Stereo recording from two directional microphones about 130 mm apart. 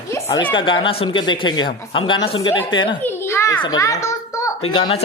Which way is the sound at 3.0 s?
20° left (ahead or behind).